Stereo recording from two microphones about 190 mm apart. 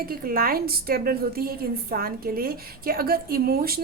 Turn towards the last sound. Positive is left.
turn(degrees=-55)  # may be behind; listen again after turning